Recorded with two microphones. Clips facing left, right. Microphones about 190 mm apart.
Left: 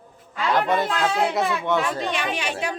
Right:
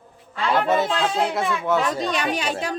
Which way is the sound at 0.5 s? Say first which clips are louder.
Right 2 dB; 5° right (ahead or behind).